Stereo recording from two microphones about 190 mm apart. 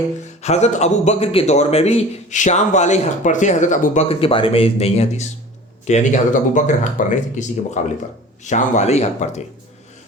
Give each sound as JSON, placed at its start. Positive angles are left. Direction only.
{"t": 0.4, "sound": "a man's voice", "side_deg": 35}
{"t": 4.1, "sound": "a man's voice", "side_deg": 30}